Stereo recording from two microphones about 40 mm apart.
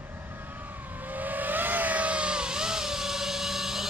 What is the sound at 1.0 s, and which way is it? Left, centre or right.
Vehicle, right.